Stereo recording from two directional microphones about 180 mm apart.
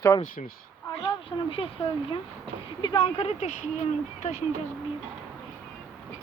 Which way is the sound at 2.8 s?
25° left (ahead or behind).